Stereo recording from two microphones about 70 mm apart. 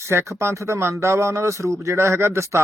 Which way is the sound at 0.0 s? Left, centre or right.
Right.